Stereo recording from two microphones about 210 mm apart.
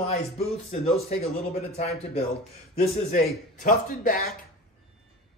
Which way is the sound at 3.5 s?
40° left (ahead or behind).